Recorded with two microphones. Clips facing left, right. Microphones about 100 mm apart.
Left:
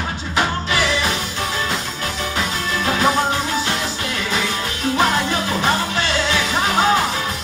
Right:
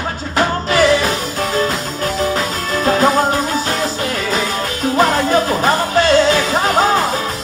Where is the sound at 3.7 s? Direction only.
40° right (ahead or behind).